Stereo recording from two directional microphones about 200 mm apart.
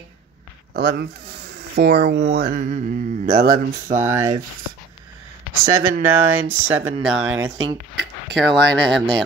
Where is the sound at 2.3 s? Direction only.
50° right (ahead or behind).